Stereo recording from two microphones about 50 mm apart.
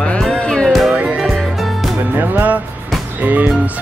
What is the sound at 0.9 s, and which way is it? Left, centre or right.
Music, right.